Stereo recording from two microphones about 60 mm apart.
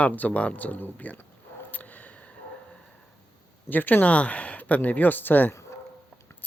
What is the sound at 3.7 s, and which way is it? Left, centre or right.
Speech, left.